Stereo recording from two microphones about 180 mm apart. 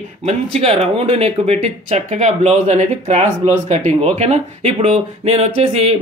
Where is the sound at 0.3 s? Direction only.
35° right (ahead or behind).